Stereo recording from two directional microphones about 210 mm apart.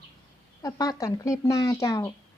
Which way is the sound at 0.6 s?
15° left (ahead or behind).